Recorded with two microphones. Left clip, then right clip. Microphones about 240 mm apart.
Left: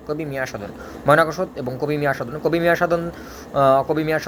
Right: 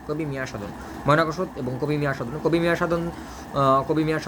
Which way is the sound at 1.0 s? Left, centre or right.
Centre.